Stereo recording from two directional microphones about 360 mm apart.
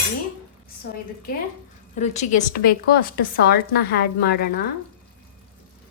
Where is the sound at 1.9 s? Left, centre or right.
Centre.